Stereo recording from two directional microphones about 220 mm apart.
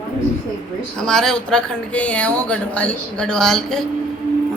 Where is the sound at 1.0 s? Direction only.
Centre (ahead or behind).